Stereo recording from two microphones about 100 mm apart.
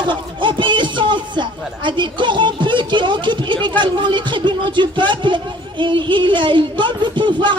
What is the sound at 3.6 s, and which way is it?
Speech, 50° right (ahead or behind).